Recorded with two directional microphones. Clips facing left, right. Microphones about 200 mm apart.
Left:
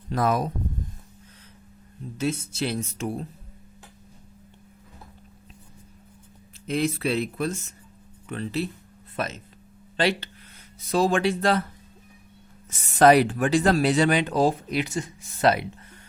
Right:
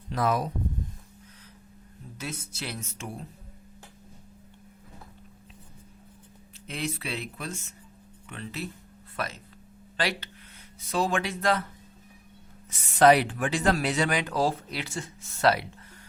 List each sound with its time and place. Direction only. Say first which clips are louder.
0.1 s speech: left 3 dB; 45° left (ahead or behind)
2.1 s speech: left 11 dB; 25° left (ahead or behind)
6.7 s speech: left 9 dB; 40° left (ahead or behind)
9.1 s speech: left 4 dB; 20° left (ahead or behind)
10.8 s speech: left 5 dB; 40° left (ahead or behind)
12.7 s speech: left 3 dB; 45° left (ahead or behind); by 15.6 s 20° left (ahead or behind)